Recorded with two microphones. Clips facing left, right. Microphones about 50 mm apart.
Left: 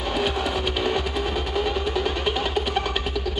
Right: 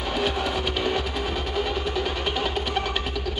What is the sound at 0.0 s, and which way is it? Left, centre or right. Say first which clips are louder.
Music: left 1 dB; centre.